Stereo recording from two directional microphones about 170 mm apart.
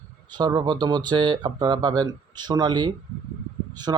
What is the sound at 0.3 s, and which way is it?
Speech, 25° right (ahead or behind).